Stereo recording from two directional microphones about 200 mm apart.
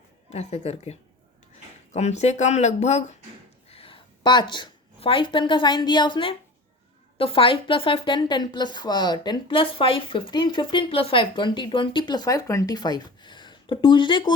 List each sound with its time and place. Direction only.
0.3 s a woman's voice: 30° left (ahead or behind)